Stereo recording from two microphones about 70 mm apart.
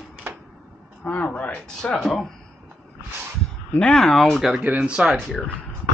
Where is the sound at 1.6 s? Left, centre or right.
Centre.